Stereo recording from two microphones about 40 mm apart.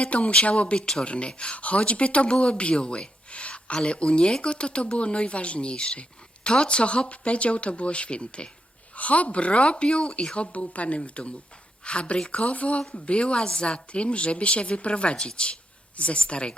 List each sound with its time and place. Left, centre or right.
0.0 s speech: left